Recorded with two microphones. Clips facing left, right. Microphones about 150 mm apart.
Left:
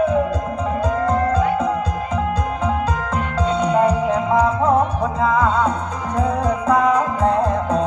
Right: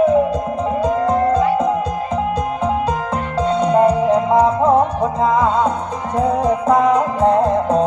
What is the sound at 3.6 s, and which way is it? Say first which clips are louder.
Music: right 4 dB; 25° right (ahead or behind).